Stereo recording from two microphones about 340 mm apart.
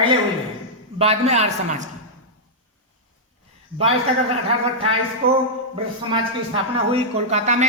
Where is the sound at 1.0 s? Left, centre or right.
Centre.